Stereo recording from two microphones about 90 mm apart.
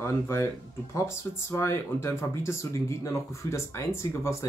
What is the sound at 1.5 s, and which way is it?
Speech, 30° left (ahead or behind).